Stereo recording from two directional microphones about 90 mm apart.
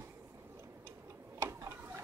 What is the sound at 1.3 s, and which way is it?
Tick-tock, 35° right (ahead or behind).